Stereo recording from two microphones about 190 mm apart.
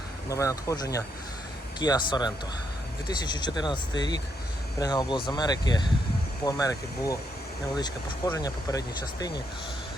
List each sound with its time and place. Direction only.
0.3 s speech: 15° left (ahead or behind)